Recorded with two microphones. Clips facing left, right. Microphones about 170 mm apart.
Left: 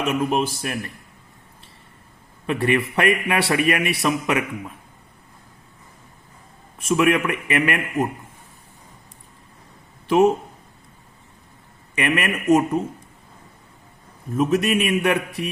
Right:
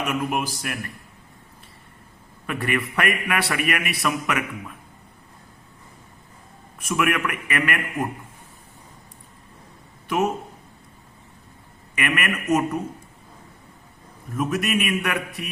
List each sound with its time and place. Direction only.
0.0 s a man's voice: 25° left (ahead or behind)
2.5 s a man's voice: 25° left (ahead or behind)
6.7 s a man's voice: 30° left (ahead or behind)
11.9 s a man's voice: 25° left (ahead or behind)
14.3 s a man's voice: 25° left (ahead or behind)